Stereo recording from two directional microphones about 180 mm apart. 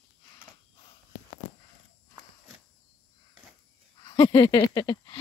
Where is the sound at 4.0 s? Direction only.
30° left (ahead or behind).